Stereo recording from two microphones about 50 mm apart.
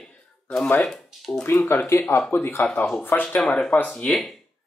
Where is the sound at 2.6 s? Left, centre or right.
Left.